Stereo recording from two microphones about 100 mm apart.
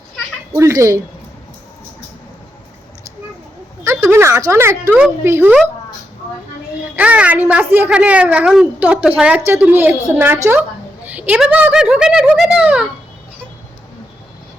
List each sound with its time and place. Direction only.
0.5 s speech: 30° right (ahead or behind)
3.8 s a sound: 30° right (ahead or behind)
5.2 s speech: 25° right (ahead or behind)
6.9 s a child's voice: 15° right (ahead or behind)